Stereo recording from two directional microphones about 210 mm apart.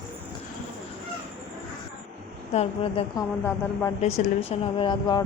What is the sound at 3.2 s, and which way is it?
Speech, 15° left (ahead or behind).